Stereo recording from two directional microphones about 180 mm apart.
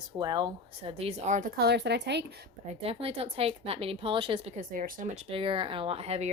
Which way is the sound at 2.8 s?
30° right (ahead or behind).